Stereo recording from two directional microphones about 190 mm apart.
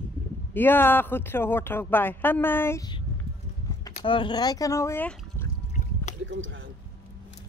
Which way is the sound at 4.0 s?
25° left (ahead or behind).